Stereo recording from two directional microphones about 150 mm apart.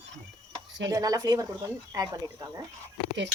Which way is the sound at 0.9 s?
25° right (ahead or behind).